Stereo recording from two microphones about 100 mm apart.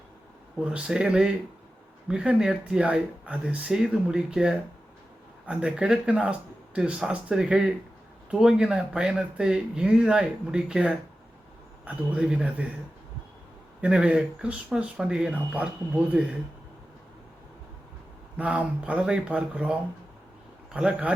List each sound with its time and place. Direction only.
0.6 s speech: 10° right (ahead or behind)
13.8 s speech: 10° right (ahead or behind)
18.3 s speech: 10° right (ahead or behind)